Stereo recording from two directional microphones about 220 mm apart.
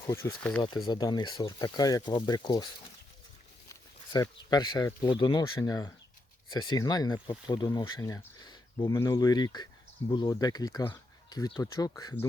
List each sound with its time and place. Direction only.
0.0 s speech: 15° left (ahead or behind)
3.7 s speech: 15° left (ahead or behind)